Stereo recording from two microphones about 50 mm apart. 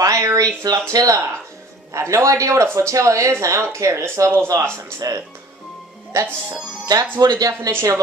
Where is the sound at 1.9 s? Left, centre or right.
Right.